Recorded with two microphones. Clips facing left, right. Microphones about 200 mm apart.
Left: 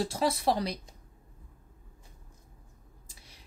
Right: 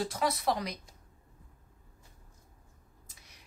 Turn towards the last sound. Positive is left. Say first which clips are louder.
# left 3 dB
turn(degrees=30)  # may be behind; listen again after turning